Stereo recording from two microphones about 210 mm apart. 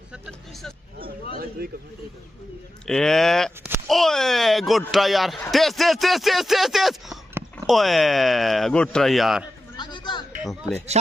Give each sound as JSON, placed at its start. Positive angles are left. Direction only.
{"t": 0.1, "sound": "speech", "side_deg": 0}
{"t": 1.3, "sound": "speech", "side_deg": -45}
{"t": 2.9, "sound": "speech", "side_deg": 0}
{"t": 9.8, "sound": "a sound", "side_deg": 20}